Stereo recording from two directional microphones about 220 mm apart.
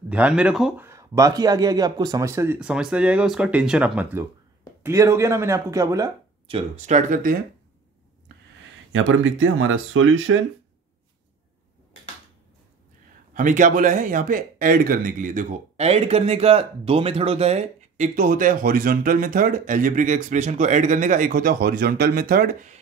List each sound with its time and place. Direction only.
0.1 s speech: 5° right (ahead or behind); by 7.3 s 35° right (ahead or behind)
8.9 s speech: 60° right (ahead or behind)
13.3 s speech: 35° right (ahead or behind)